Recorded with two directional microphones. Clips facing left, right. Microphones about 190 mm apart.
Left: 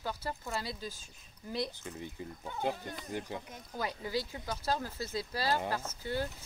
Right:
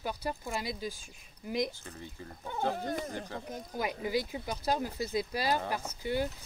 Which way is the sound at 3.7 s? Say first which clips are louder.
Right 3 dB; 15° right (ahead or behind).